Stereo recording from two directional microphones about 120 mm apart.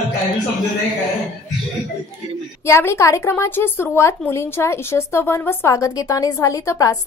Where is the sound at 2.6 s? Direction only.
20° left (ahead or behind).